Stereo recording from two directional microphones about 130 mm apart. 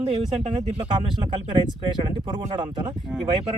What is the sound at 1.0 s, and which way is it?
Speech, 40° right (ahead or behind).